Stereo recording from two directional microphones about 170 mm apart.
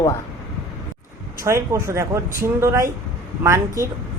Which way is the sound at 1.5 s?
15° right (ahead or behind).